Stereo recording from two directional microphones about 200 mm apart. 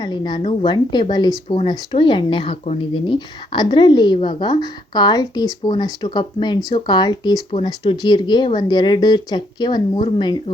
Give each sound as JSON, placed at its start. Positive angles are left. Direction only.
{"t": 0.0, "sound": "speech", "side_deg": 20}